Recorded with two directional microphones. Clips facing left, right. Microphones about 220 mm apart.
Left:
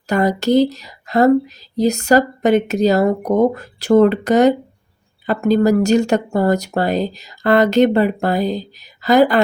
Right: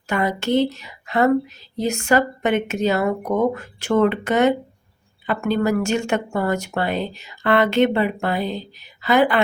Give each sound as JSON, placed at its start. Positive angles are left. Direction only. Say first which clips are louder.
{"t": 0.1, "sound": "speech", "louder": "left 5 dB", "side_deg": 40}